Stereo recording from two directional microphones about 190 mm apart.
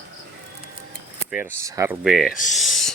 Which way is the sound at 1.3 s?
10° right (ahead or behind).